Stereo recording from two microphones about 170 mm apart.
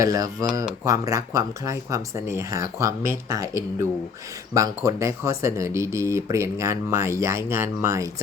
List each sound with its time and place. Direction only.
0.0 s speech: 20° right (ahead or behind)